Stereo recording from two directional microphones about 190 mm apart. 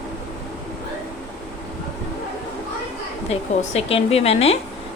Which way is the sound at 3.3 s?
30° left (ahead or behind).